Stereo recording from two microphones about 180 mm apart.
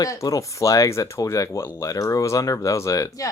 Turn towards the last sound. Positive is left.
turn(degrees=20)  # may be behind; listen again after turning